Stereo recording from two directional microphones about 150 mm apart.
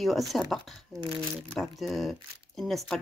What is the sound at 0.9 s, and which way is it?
Speech, 30° right (ahead or behind).